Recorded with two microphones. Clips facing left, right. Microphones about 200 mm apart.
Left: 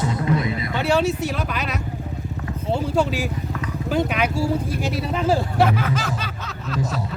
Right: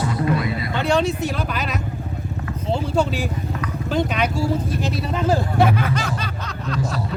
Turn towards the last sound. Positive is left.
turn(degrees=0)  # may be behind; listen again after turning